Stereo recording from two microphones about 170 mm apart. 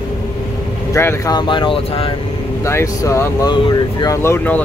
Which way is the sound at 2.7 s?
15° left (ahead or behind).